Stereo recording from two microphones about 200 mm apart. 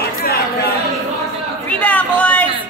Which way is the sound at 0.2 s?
50° left (ahead or behind).